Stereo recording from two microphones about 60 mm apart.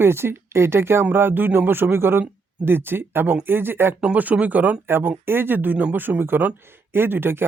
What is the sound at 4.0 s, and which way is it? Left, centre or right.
Speech, right.